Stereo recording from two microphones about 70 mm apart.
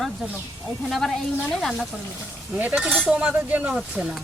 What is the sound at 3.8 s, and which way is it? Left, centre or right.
Speech, centre.